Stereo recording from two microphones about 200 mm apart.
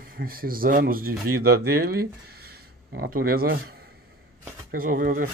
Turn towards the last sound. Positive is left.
turn(degrees=-45)  # may be behind; listen again after turning